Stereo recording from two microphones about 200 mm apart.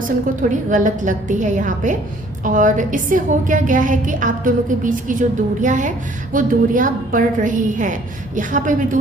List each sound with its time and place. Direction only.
0.5 s a woman's voice: 40° right (ahead or behind)